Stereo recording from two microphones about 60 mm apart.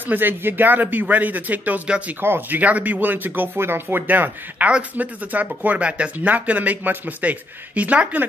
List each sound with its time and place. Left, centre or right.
0.0 s speech: right
2.2 s speech: right
2.6 s speech: right